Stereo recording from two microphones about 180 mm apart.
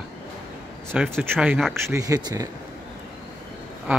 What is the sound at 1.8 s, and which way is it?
Speech, 15° right (ahead or behind).